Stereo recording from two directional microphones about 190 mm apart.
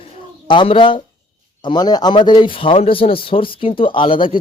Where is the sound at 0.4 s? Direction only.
25° left (ahead or behind).